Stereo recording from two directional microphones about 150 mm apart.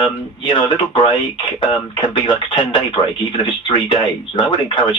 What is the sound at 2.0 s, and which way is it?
Speech, 30° left (ahead or behind).